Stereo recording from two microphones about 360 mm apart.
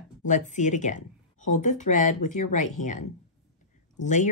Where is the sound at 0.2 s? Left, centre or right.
Centre.